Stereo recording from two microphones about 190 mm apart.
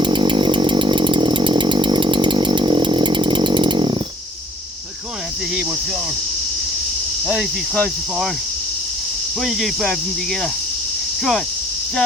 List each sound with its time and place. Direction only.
0.0 s chainsaw: 25° right (ahead or behind)
7.3 s cricket: centre (ahead or behind)
9.4 s cricket: centre (ahead or behind)
11.2 s cricket: centre (ahead or behind)